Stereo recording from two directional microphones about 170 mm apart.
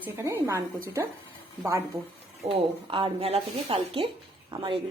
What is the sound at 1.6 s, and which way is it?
Speech, 15° right (ahead or behind).